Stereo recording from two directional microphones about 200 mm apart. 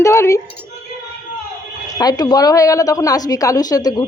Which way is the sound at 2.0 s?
20° left (ahead or behind).